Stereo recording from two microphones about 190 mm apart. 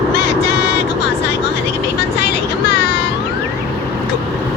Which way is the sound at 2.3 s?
60° left (ahead or behind).